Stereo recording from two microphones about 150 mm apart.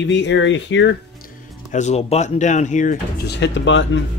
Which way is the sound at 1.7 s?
50° left (ahead or behind).